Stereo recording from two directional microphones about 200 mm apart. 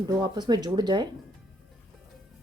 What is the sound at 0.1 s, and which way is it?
Speech, 20° right (ahead or behind).